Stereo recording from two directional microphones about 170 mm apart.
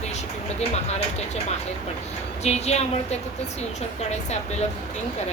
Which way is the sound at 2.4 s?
40° left (ahead or behind).